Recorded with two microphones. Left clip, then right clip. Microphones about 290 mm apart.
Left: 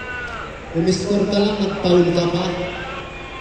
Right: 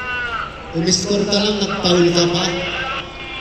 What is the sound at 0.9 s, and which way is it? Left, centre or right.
A man's voice, right.